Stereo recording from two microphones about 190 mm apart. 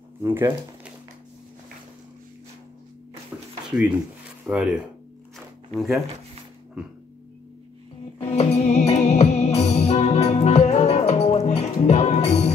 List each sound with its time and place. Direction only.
0.2 s speech: 10° right (ahead or behind)
3.3 s a sound: 10° right (ahead or behind)
3.7 s speech: 5° right (ahead or behind)
8.2 s music: 35° left (ahead or behind)